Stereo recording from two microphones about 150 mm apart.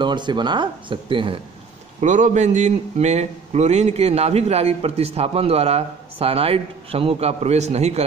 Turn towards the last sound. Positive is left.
turn(degrees=-45)  # may be behind; listen again after turning